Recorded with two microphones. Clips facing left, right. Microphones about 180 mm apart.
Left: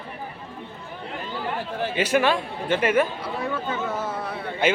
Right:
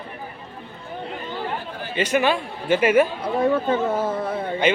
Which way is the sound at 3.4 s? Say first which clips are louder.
Right 9 dB; 35° right (ahead or behind).